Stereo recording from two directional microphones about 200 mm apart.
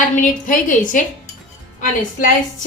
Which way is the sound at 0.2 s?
40° left (ahead or behind).